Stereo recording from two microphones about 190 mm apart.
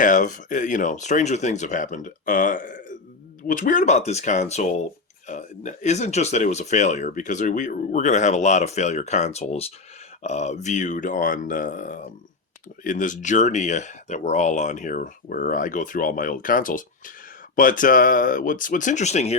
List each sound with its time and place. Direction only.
0.0 s speech: 40° left (ahead or behind)